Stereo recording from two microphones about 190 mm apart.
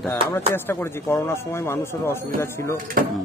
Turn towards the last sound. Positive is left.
turn(degrees=-50)  # may be behind; listen again after turning